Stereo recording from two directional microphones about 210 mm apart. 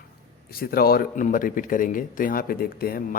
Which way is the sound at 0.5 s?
45° left (ahead or behind).